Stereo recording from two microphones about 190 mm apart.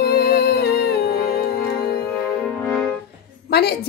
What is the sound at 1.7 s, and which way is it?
Music, 5° left (ahead or behind).